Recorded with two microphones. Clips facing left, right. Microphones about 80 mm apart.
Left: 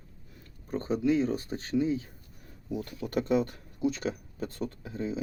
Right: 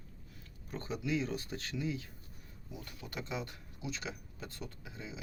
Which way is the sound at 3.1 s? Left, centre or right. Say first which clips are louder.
Left 14 dB; left.